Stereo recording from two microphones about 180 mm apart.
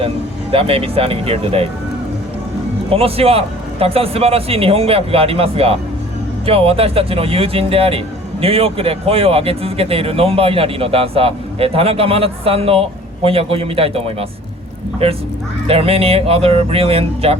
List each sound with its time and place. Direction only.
0.5 s speech: 30° right (ahead or behind)
2.9 s speech: 35° right (ahead or behind)